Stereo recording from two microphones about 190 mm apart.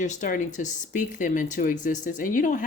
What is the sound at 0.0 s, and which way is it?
Speech, 40° left (ahead or behind).